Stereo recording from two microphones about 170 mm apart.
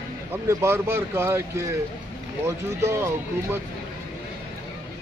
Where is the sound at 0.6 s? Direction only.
15° right (ahead or behind).